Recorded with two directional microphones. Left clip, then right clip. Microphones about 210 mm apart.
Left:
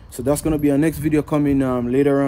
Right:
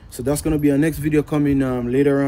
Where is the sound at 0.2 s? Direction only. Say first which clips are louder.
Left 1 dB; 25° left (ahead or behind).